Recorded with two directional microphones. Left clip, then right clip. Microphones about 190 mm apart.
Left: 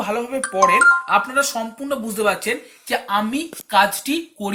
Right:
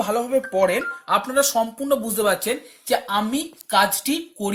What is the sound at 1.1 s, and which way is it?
Speech, 70° right (ahead or behind).